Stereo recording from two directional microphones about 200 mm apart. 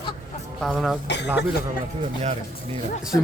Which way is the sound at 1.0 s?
60° left (ahead or behind).